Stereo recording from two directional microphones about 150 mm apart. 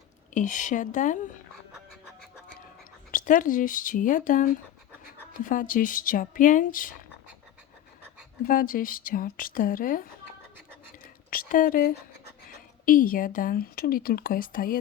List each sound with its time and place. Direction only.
0.3 s speech: 55° left (ahead or behind)
3.1 s speech: 60° left (ahead or behind)
8.4 s a woman's voice: 70° left (ahead or behind)
11.3 s a woman's voice: 65° left (ahead or behind)